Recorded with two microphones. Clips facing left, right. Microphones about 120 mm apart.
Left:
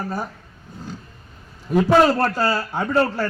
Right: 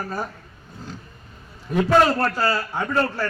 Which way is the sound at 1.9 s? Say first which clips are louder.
Left 1 dB; 15° left (ahead or behind).